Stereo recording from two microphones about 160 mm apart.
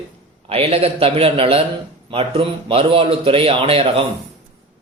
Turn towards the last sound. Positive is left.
turn(degrees=-35)  # may be behind; listen again after turning